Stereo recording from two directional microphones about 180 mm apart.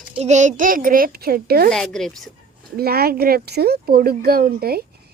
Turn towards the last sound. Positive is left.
turn(degrees=-60)  # may be behind; listen again after turning